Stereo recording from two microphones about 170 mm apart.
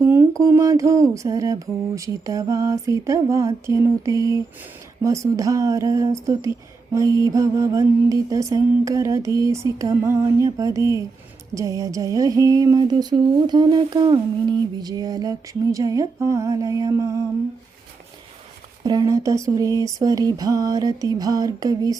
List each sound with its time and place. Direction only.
0.0 s mantra: 15° right (ahead or behind)
18.8 s mantra: 25° right (ahead or behind)